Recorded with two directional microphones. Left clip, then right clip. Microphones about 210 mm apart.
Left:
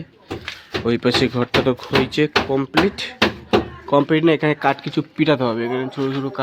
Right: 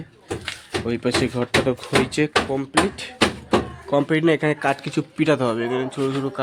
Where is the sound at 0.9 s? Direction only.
15° left (ahead or behind).